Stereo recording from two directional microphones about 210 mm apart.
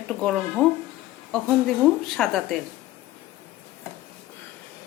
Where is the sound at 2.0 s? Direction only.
Centre (ahead or behind).